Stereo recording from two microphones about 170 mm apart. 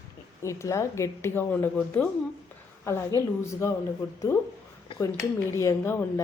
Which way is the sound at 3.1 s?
20° right (ahead or behind).